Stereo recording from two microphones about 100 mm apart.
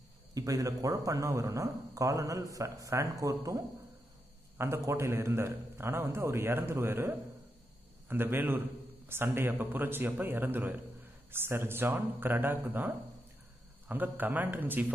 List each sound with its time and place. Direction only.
0.3 s a man's voice: 35° right (ahead or behind); by 14.9 s 20° right (ahead or behind)